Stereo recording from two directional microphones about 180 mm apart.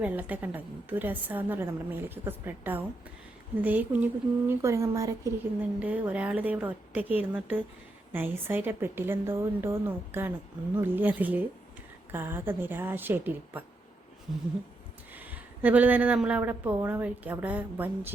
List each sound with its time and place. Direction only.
0.0 s speech: 10° right (ahead or behind)
15.1 s speech: 10° right (ahead or behind)